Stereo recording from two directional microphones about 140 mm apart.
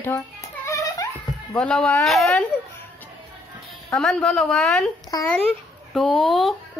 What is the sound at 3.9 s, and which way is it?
A woman's voice, 5° left (ahead or behind).